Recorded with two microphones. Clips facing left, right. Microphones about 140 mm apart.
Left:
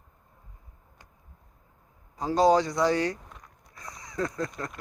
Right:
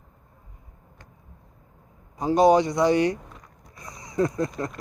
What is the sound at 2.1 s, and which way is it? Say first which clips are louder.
A man's voice: right 4 dB; 20° right (ahead or behind).